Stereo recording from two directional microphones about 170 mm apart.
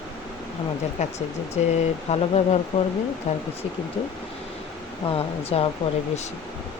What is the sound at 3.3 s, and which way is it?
Speech, 40° left (ahead or behind).